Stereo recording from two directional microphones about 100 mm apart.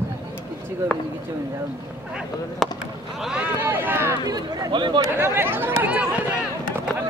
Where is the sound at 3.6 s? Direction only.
20° right (ahead or behind).